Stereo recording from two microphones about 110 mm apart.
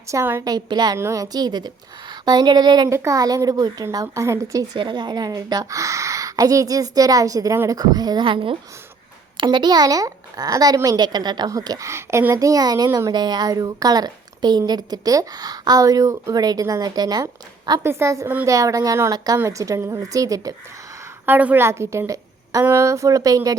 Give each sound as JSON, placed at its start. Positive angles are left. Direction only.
{"t": 0.1, "sound": "a woman's voice", "side_deg": -25}
{"t": 0.4, "sound": "a woman's voice", "side_deg": -40}
{"t": 0.9, "sound": "a woman's voice", "side_deg": -25}
{"t": 2.9, "sound": "a woman's voice", "side_deg": -30}
{"t": 4.8, "sound": "a woman's voice", "side_deg": -45}
{"t": 8.2, "sound": "a woman's voice", "side_deg": -50}
{"t": 17.8, "sound": "a woman's voice", "side_deg": -25}
{"t": 21.2, "sound": "a woman's voice", "side_deg": -15}